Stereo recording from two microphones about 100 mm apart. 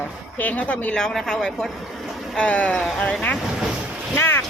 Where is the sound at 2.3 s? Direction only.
10° left (ahead or behind).